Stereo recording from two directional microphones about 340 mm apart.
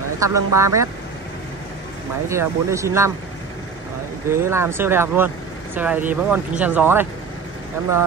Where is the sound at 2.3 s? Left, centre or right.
Centre.